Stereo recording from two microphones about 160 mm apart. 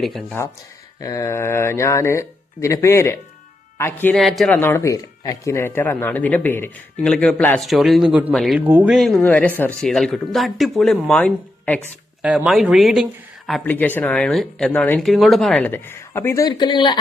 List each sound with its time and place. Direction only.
0.0 s speech: centre (ahead or behind)
0.9 s speech: 20° left (ahead or behind)
4.2 s speech: centre (ahead or behind)
8.5 s speech: 10° right (ahead or behind)
9.0 s speech: centre (ahead or behind)
12.2 s speech: 5° right (ahead or behind)
13.7 s speech: 10° left (ahead or behind); by 17.0 s 30° left (ahead or behind)